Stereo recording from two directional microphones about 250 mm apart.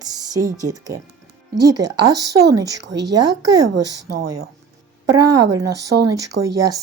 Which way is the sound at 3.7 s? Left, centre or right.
Right.